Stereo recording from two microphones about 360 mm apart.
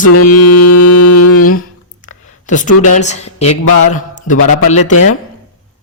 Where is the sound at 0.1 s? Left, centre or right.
Left.